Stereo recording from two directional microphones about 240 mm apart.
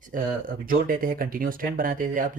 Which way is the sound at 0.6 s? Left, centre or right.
Right.